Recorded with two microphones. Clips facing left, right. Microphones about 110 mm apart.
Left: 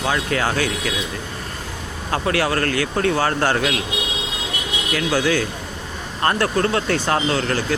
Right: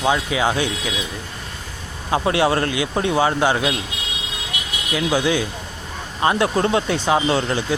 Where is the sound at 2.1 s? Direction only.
20° right (ahead or behind).